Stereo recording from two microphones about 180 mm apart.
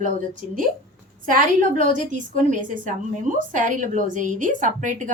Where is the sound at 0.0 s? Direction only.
45° right (ahead or behind).